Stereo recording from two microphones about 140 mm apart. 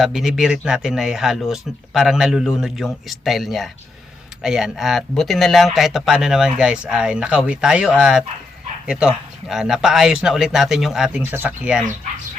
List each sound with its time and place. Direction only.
0.0 s speech: centre (ahead or behind)